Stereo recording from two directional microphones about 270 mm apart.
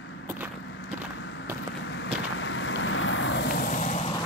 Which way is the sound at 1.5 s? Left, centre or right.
Centre.